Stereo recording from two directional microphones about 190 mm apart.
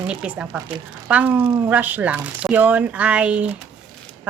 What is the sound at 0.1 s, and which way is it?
Speech, 5° right (ahead or behind).